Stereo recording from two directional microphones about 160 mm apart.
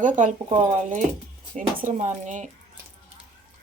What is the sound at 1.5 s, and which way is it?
Speech, 55° right (ahead or behind).